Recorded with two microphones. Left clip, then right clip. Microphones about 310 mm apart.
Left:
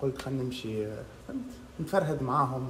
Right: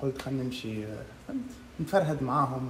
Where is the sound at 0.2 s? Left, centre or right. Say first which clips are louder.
Even; centre.